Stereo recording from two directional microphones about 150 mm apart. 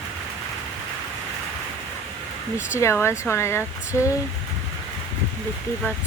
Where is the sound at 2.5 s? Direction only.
15° left (ahead or behind).